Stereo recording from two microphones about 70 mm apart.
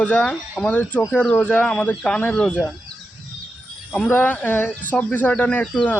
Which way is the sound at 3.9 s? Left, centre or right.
Left.